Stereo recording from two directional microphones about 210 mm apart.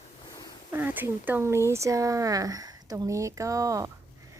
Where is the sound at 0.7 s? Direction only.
10° right (ahead or behind).